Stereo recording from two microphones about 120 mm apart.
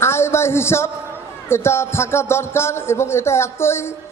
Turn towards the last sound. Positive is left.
turn(degrees=20)  # may be behind; listen again after turning